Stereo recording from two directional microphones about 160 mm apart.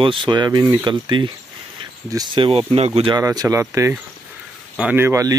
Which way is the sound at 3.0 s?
25° right (ahead or behind).